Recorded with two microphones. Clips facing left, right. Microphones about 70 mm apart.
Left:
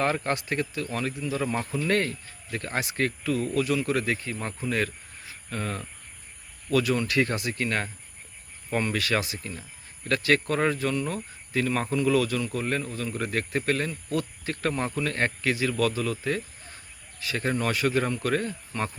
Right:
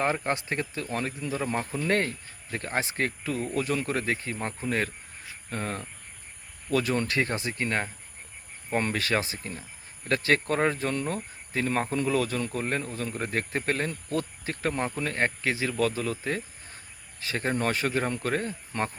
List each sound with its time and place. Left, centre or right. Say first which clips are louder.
0.0 s speech: left 1 dB; right
14.6 s speech: left 1 dB; centre